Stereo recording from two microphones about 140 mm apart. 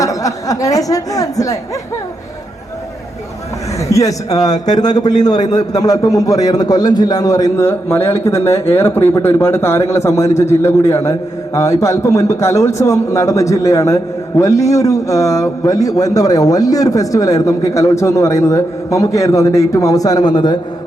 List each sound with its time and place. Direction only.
0.0 s speech: 25° left (ahead or behind)
3.8 s a man's voice: 25° left (ahead or behind)